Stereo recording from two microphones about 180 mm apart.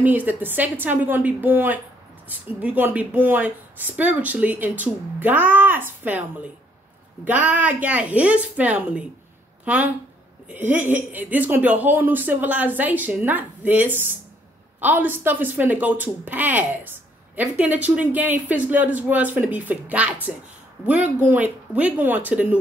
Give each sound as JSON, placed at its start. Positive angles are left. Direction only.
{"t": 0.0, "sound": "speech", "side_deg": -10}